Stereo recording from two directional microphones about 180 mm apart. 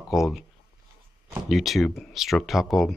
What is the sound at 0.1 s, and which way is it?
Speech, centre (ahead or behind).